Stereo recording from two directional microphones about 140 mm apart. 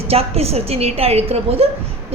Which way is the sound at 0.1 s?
45° right (ahead or behind).